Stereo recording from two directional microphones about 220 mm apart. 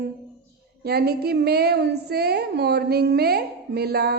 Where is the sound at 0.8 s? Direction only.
45° right (ahead or behind).